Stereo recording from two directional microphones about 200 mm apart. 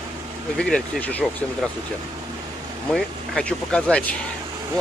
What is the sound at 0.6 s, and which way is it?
Speech, 5° left (ahead or behind).